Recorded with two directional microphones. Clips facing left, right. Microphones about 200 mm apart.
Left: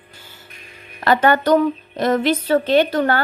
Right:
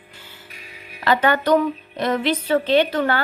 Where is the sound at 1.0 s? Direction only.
45° left (ahead or behind).